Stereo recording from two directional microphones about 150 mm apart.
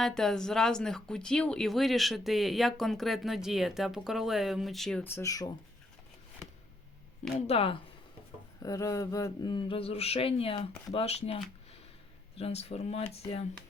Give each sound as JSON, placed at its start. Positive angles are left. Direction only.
{"t": 0.0, "sound": "speech", "side_deg": 5}
{"t": 5.0, "sound": "speech", "side_deg": 20}
{"t": 7.4, "sound": "speech", "side_deg": 40}
{"t": 8.6, "sound": "speech", "side_deg": 20}
{"t": 12.4, "sound": "speech", "side_deg": 40}